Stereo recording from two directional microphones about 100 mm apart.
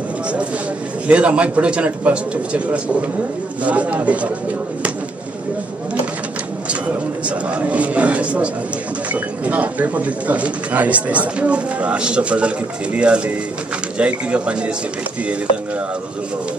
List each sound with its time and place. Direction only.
1.0 s speech: 15° right (ahead or behind)
7.2 s speech: 15° right (ahead or behind)